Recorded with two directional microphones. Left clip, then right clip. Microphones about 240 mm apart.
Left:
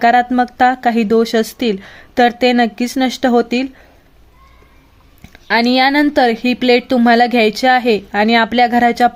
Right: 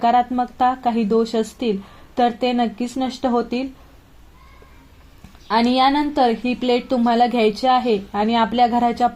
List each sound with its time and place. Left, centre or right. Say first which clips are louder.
0.0 s a woman's voice: left 5 dB; left
5.5 s a woman's voice: left 4 dB; left